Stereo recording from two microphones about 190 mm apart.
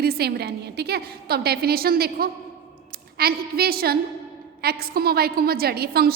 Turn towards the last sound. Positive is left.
turn(degrees=-55)  # may be behind; listen again after turning